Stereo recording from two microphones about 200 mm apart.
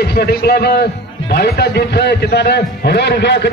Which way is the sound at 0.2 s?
50° left (ahead or behind).